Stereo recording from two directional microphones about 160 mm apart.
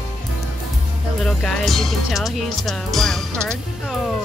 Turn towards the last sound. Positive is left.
turn(degrees=0)  # may be behind; listen again after turning